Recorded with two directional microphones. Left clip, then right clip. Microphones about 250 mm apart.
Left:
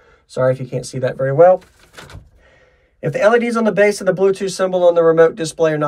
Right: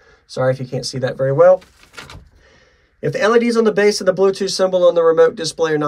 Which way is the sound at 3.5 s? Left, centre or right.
Centre.